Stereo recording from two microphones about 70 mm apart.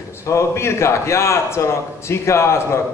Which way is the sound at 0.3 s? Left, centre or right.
Left.